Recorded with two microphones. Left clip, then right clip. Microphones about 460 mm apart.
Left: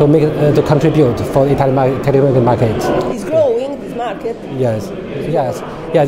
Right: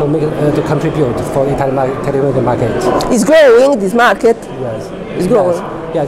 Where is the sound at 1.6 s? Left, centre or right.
Left.